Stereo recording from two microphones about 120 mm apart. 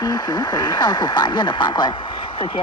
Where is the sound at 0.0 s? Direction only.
35° left (ahead or behind).